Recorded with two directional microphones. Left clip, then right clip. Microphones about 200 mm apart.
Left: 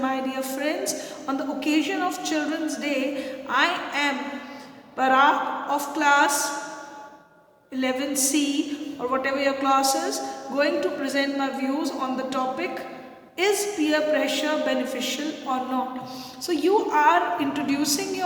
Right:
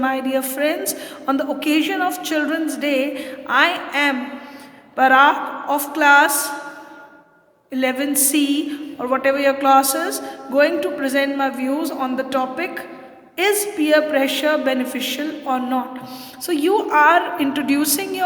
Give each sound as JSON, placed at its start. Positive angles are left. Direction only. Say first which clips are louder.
{"t": 0.0, "sound": "a woman's voice", "louder": "right 6 dB", "side_deg": -50}
{"t": 7.7, "sound": "a woman's voice", "louder": "right 6 dB", "side_deg": -50}